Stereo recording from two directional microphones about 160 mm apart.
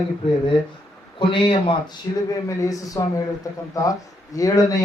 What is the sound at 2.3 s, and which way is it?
Speech, 20° left (ahead or behind).